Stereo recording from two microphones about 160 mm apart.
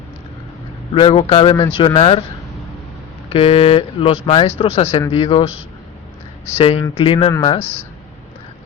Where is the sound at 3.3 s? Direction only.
35° left (ahead or behind).